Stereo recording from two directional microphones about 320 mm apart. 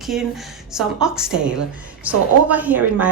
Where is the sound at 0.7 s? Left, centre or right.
Centre.